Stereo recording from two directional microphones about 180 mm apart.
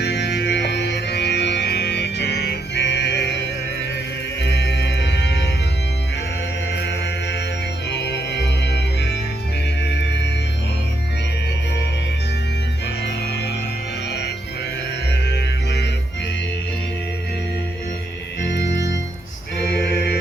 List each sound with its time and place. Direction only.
0.0 s music: 70° left (ahead or behind)
4.4 s music: 70° left (ahead or behind)
6.7 s music: 70° left (ahead or behind)
15.3 s music: 70° left (ahead or behind)
18.4 s organ: 75° left (ahead or behind)
19.7 s music: 65° left (ahead or behind)